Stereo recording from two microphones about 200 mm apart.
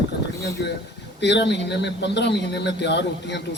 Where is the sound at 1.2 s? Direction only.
60° left (ahead or behind).